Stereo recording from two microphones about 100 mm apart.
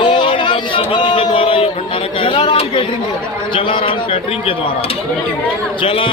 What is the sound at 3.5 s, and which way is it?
A man's voice, 60° left (ahead or behind).